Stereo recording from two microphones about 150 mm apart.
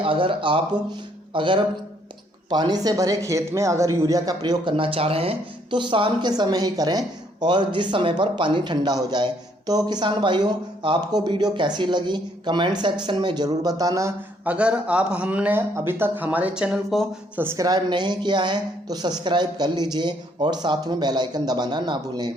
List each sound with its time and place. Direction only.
0.0 s speech: 35° right (ahead or behind)
14.4 s speech: 10° right (ahead or behind)
17.3 s speech: 15° right (ahead or behind)
17.7 s speech: 30° right (ahead or behind)